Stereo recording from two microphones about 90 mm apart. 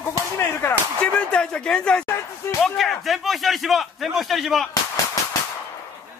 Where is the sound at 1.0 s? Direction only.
10° left (ahead or behind).